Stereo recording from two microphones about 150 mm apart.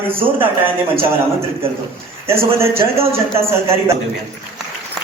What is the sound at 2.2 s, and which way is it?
A man's voice, 15° right (ahead or behind).